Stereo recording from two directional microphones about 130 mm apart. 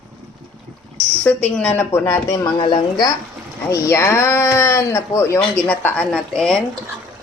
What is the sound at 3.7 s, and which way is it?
Speech, 20° left (ahead or behind).